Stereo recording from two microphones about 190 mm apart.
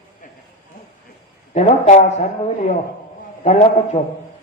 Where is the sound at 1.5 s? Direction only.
40° left (ahead or behind).